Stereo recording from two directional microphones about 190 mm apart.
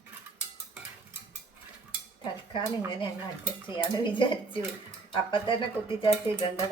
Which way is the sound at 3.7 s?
25° left (ahead or behind).